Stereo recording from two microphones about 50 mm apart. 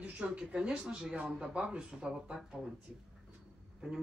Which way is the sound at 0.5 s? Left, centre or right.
Right.